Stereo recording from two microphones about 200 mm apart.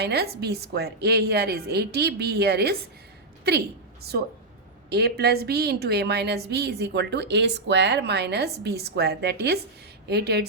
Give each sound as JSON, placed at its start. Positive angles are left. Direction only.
{"t": 0.0, "sound": "a woman's voice", "side_deg": -55}
{"t": 4.1, "sound": "a woman's voice", "side_deg": -55}